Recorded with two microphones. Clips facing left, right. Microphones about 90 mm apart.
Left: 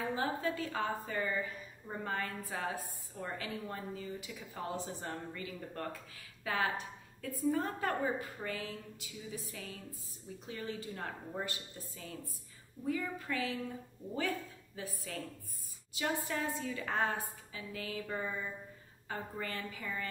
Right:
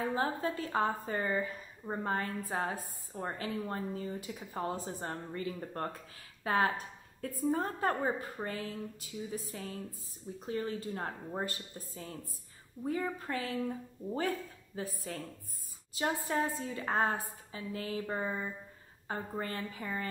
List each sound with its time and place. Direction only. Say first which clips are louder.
0.0 s a woman's voice: right 2 dB; 35° right (ahead or behind)
14.8 s a woman's voice: right 3 dB; 35° right (ahead or behind)